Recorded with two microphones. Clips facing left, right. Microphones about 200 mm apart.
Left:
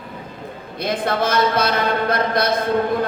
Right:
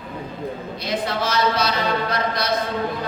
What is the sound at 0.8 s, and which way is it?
A man's voice, 55° left (ahead or behind).